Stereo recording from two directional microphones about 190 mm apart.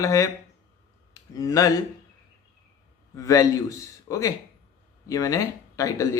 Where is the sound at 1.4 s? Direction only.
15° left (ahead or behind).